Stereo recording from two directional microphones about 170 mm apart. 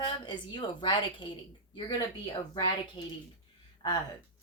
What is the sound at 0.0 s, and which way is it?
A woman's voice, 30° left (ahead or behind).